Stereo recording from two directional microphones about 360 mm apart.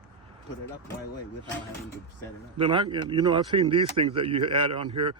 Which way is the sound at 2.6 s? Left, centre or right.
Centre.